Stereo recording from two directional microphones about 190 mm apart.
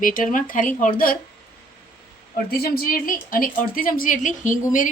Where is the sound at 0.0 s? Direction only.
45° left (ahead or behind).